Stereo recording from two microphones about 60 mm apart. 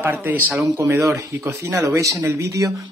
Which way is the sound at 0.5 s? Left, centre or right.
Right.